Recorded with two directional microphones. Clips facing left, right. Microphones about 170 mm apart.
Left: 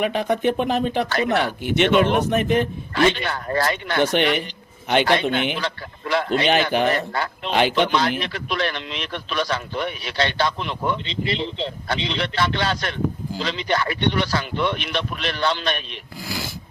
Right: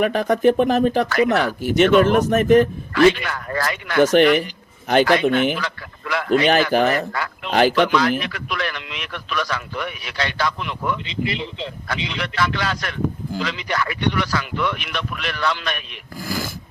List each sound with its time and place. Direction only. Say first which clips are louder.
0.0 s speech: right 4 dB; 45° right (ahead or behind)
2.9 s a man's voice: right 4 dB; 30° left (ahead or behind)
4.0 s speech: right 6 dB; 45° right (ahead or behind)
5.0 s a man's voice: right 3 dB; 30° left (ahead or behind)
6.4 s speech: right 3 dB; 40° right (ahead or behind)
6.9 s a man's voice: right 1 dB; 30° left (ahead or behind)
7.5 s speech: right 3 dB; 40° right (ahead or behind)
7.8 s a man's voice: right 2 dB; 30° left (ahead or behind)
16.1 s speech: right 4 dB; 45° right (ahead or behind)